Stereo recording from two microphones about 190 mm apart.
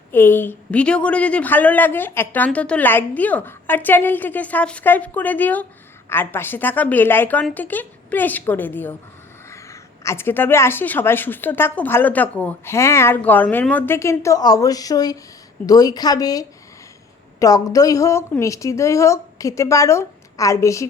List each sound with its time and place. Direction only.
0.1 s a woman's voice: 10° left (ahead or behind)